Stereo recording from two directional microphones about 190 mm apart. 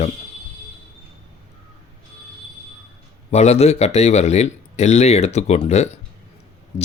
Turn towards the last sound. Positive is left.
turn(degrees=35)  # may be behind; listen again after turning